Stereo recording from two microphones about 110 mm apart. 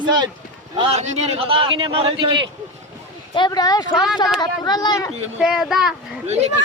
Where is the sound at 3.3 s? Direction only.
40° left (ahead or behind).